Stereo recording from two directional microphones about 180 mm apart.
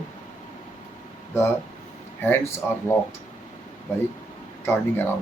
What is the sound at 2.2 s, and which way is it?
Speech, 15° left (ahead or behind).